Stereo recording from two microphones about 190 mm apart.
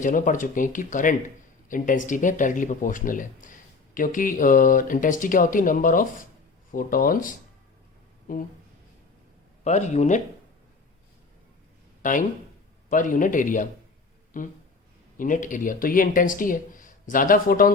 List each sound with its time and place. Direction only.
0.0 s speech: 45° left (ahead or behind)
9.6 s speech: 35° left (ahead or behind)
12.0 s speech: 40° left (ahead or behind)